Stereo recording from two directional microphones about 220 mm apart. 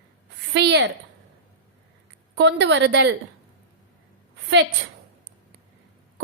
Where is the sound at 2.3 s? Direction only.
55° right (ahead or behind).